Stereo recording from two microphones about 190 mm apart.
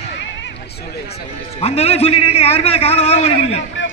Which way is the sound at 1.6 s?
35° left (ahead or behind).